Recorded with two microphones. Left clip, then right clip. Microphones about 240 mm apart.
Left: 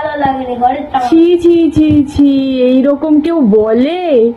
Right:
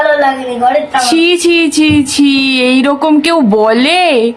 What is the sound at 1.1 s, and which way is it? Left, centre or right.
Speech, centre.